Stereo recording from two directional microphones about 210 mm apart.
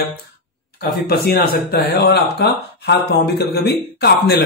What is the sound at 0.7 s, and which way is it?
Speech, 50° left (ahead or behind).